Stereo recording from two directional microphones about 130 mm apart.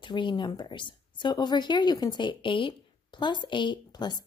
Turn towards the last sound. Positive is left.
turn(degrees=35)  # may be behind; listen again after turning